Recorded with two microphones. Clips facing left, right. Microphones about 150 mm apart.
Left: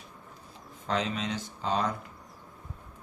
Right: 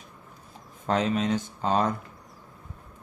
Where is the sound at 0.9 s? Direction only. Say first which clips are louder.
Right 6 dB; 50° right (ahead or behind).